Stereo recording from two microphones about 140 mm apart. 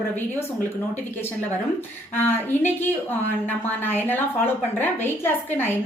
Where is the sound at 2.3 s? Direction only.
15° left (ahead or behind).